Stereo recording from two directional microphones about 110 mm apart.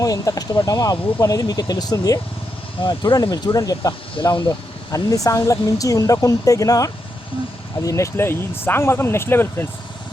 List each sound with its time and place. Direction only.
0.0 s speech: 30° left (ahead or behind)